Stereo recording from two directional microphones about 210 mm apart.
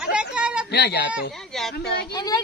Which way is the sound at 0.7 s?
50° left (ahead or behind).